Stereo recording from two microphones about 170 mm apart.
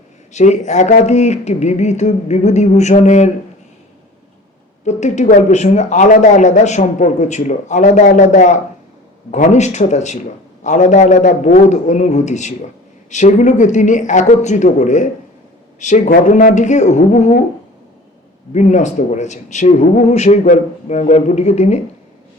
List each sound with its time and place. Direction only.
0.3 s speech: 45° left (ahead or behind)
4.9 s speech: 45° left (ahead or behind)
18.5 s speech: 45° left (ahead or behind)